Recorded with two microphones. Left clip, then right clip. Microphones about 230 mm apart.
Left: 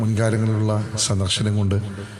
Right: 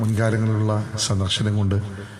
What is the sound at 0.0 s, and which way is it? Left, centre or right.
A man's voice, left.